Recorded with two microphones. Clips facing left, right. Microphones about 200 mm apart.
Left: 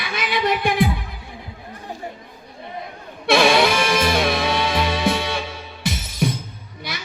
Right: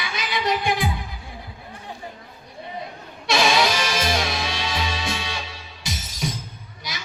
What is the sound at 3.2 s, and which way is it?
Music, 55° left (ahead or behind).